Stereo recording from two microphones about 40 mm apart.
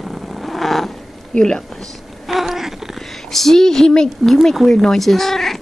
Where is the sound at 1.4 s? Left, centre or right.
Centre.